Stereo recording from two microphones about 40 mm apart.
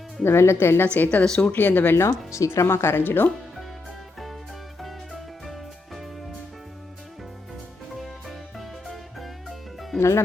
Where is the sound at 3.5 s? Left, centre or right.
Centre.